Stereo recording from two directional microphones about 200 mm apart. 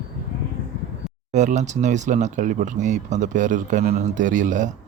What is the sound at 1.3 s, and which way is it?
Speech, 35° right (ahead or behind).